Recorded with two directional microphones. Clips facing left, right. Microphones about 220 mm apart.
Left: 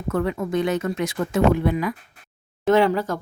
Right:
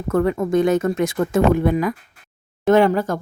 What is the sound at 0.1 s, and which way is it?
Speech, 45° right (ahead or behind).